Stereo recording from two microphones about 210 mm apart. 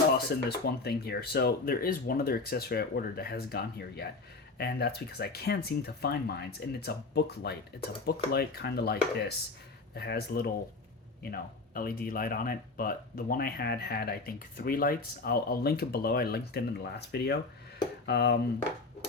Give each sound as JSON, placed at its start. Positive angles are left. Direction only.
{"t": 0.3, "sound": "speech", "side_deg": 45}